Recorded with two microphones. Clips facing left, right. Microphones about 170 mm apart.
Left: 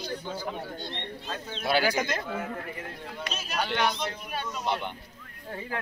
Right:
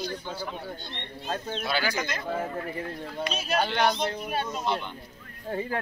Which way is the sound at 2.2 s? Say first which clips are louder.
Right 3 dB; 30° right (ahead or behind).